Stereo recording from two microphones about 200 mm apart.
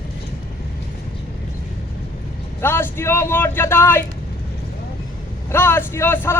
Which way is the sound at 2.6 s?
10° left (ahead or behind).